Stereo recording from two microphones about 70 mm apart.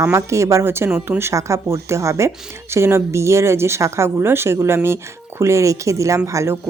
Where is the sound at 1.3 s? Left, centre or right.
Right.